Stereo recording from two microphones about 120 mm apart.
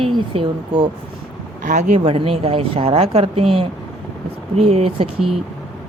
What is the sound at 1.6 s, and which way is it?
Speech, 90° right.